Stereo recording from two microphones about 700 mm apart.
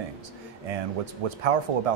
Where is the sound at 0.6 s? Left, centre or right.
Right.